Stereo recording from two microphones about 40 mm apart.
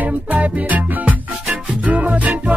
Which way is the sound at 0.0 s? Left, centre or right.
Right.